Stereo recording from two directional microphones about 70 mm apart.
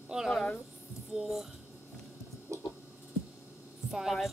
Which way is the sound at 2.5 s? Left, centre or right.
Right.